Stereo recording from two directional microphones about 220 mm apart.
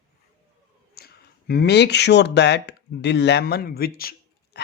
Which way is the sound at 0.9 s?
45° left (ahead or behind).